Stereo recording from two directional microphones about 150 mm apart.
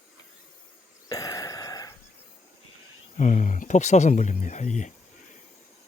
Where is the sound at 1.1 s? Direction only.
25° left (ahead or behind).